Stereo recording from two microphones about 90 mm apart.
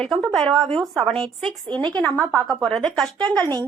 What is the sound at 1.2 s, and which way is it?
Speech, 80° right.